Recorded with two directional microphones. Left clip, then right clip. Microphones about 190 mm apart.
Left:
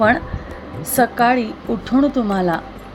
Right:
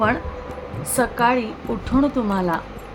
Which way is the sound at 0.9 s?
10° left (ahead or behind).